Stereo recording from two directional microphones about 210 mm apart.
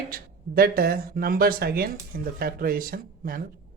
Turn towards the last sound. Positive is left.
turn(degrees=-45)  # may be behind; listen again after turning